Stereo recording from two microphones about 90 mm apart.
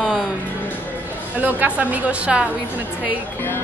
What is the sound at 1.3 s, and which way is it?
A woman's voice, 15° right (ahead or behind).